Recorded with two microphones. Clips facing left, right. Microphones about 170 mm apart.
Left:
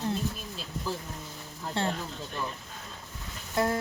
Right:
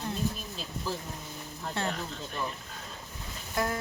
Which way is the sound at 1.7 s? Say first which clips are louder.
Left 3 dB; 25° left (ahead or behind).